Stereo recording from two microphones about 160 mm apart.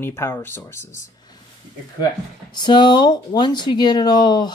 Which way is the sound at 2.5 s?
30° left (ahead or behind).